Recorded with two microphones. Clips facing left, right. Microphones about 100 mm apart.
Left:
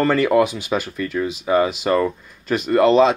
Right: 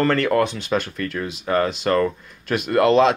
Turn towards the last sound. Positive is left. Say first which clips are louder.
# left 2 dB
turn(degrees=0)  # may be behind; listen again after turning